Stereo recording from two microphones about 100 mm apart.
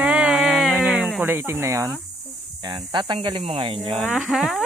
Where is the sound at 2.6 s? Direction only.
45° right (ahead or behind).